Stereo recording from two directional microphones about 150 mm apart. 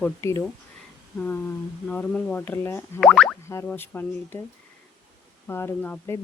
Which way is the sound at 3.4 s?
15° left (ahead or behind).